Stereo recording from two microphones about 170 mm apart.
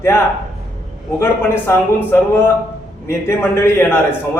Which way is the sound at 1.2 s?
15° left (ahead or behind).